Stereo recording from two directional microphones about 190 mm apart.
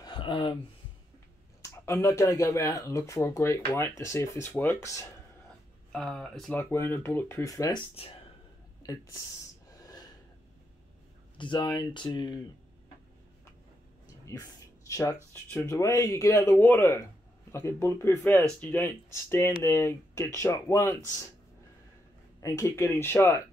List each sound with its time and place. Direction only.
0.0 s a sound: 25° left (ahead or behind)
1.6 s speech: 15° left (ahead or behind)
5.9 s speech: 5° left (ahead or behind)
6.6 s speech: 15° left (ahead or behind)
8.8 s speech: 15° left (ahead or behind)
9.7 s snort: 20° left (ahead or behind)
11.3 s speech: 25° left (ahead or behind)
14.2 s a sound: 15° left (ahead or behind)
15.5 s speech: 15° left (ahead or behind)
22.4 s speech: 15° left (ahead or behind)